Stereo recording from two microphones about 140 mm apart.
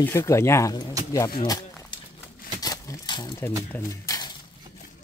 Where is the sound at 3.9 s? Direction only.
25° left (ahead or behind).